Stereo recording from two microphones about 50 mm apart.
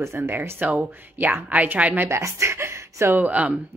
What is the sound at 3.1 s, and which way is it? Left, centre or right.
Speech, right.